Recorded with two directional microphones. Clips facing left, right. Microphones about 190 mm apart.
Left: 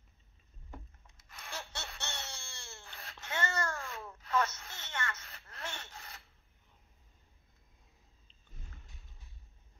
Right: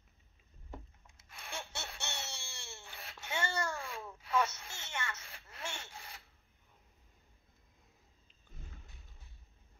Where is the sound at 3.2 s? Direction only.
10° right (ahead or behind).